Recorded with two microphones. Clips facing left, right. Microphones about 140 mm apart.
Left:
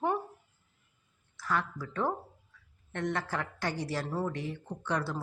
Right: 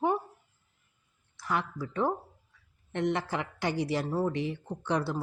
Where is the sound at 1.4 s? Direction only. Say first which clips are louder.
Right 1 dB; 15° right (ahead or behind).